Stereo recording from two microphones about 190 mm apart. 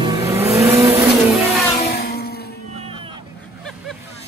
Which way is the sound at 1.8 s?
55° left (ahead or behind).